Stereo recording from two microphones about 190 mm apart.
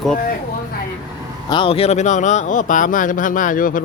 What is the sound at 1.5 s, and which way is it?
Speech, 30° left (ahead or behind).